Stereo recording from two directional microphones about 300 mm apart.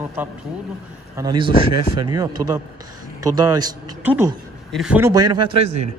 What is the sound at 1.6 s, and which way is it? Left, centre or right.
Speech, right.